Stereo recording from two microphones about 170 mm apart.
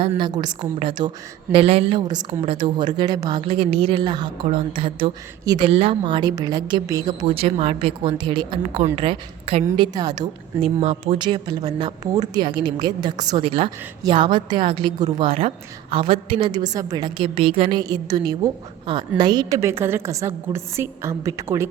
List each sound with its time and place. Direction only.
0.4 s a woman's voice: 30° right (ahead or behind)
10.6 s a woman's voice: 40° right (ahead or behind)
11.2 s a woman's voice: 25° right (ahead or behind)